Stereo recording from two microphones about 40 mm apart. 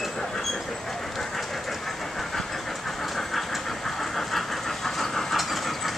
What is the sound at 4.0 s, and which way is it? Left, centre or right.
Vehicle, centre.